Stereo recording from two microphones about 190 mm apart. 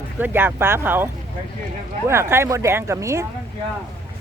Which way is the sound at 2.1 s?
15° right (ahead or behind).